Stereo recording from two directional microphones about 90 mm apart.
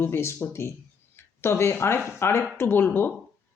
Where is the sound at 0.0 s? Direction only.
30° left (ahead or behind).